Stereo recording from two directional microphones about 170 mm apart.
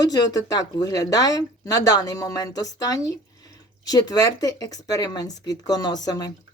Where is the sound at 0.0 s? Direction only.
20° left (ahead or behind).